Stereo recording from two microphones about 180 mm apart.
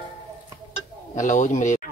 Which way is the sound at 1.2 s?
45° left (ahead or behind).